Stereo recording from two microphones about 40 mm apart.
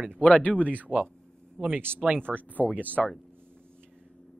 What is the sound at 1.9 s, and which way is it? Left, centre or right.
Speech, right.